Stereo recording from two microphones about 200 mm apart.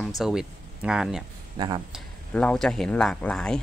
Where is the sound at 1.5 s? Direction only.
20° right (ahead or behind).